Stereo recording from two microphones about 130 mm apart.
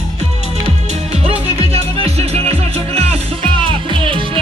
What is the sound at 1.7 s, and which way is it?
Music, 50° right (ahead or behind).